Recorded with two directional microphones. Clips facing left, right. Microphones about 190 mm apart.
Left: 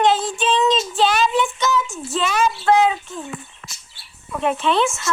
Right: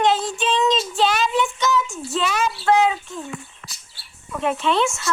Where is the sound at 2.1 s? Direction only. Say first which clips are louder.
Left 3 dB; 35° left (ahead or behind).